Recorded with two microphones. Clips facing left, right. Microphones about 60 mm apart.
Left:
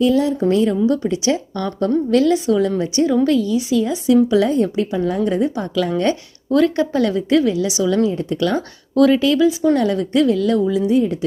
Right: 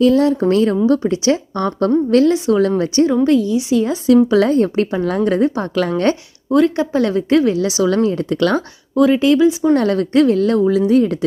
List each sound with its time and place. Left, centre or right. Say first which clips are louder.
0.1 s a woman's voice: right 3 dB; right
1.0 s a woman's voice: right 3 dB; right
2.5 s a woman's voice: right 3 dB; right
3.2 s a woman's voice: right 2 dB; right
3.8 s a woman's voice: right 4 dB; right
6.5 s a woman's voice: right 2 dB; right
8.1 s speech: right 3 dB; right
9.0 s speech: even; centre
9.2 s speech: right 3 dB; right
9.7 s a woman's voice: right 3 dB; right